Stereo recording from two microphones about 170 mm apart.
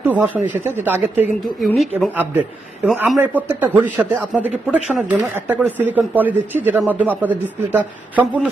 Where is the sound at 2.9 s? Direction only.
10° right (ahead or behind).